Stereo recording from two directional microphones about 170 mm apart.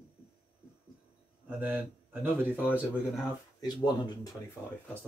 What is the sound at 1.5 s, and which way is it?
Speech, 10° right (ahead or behind).